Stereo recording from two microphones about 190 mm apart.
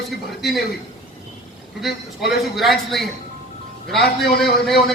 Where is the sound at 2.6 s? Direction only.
Centre (ahead or behind).